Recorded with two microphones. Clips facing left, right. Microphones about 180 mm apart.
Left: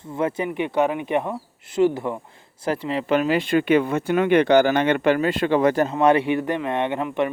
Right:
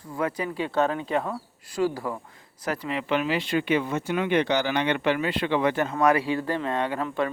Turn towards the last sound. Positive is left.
turn(degrees=20)  # may be behind; listen again after turning